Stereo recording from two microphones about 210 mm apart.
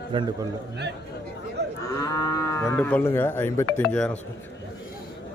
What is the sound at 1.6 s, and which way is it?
Cattle, 55° right (ahead or behind).